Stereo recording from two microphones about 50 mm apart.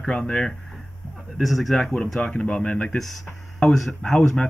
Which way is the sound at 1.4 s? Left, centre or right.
Centre.